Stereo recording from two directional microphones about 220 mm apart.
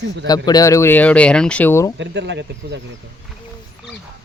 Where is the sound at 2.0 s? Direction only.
55° right (ahead or behind).